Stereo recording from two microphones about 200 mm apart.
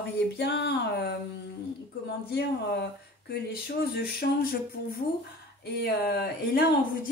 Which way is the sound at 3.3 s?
50° left (ahead or behind).